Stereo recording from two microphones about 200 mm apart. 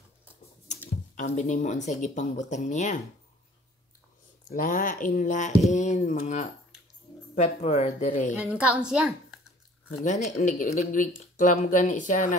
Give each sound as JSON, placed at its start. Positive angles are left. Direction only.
{"t": 0.7, "sound": "speech", "side_deg": 35}
{"t": 4.5, "sound": "speech", "side_deg": 45}
{"t": 8.4, "sound": "a woman's voice", "side_deg": -5}
{"t": 9.8, "sound": "speech", "side_deg": 35}